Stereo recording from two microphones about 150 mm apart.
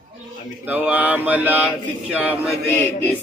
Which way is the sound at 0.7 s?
10° right (ahead or behind).